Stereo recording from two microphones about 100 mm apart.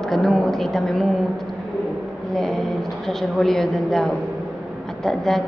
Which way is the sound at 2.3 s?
Centre (ahead or behind).